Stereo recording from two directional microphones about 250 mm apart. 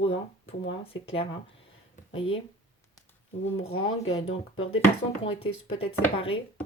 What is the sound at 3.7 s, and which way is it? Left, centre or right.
Speech, left.